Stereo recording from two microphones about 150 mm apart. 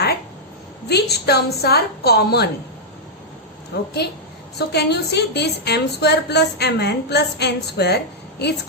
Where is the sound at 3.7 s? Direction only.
90° left.